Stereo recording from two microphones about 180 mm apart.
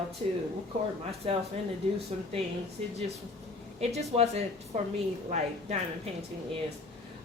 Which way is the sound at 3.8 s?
35° right (ahead or behind).